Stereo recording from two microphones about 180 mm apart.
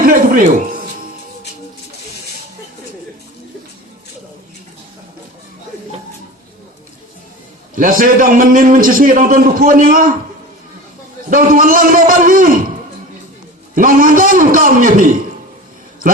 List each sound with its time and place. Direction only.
0.0 s music: 50° right (ahead or behind)
7.8 s a man's voice: 50° right (ahead or behind)
11.3 s a man's voice: 50° right (ahead or behind)
13.7 s a man's voice: 50° right (ahead or behind)